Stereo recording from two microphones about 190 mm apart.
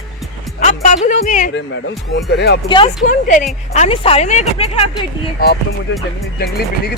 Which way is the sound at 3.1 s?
45° left (ahead or behind).